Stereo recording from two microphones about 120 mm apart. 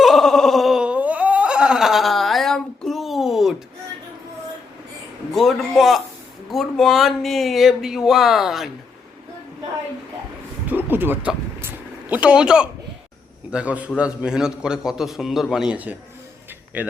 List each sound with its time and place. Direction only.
0.0 s wail: centre (ahead or behind)
5.3 s speech: centre (ahead or behind)
10.7 s a sound: 15° right (ahead or behind)
11.6 s vehicle: 15° right (ahead or behind)
13.5 s a man's voice: 10° right (ahead or behind)